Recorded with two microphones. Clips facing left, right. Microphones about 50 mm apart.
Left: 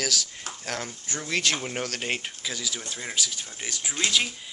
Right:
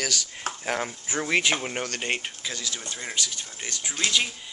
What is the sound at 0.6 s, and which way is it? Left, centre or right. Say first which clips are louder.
Speech: right 4 dB; centre.